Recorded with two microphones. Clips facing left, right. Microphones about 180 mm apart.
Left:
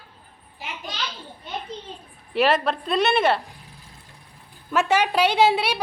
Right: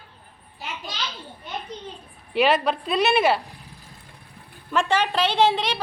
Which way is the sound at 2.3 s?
Centre (ahead or behind).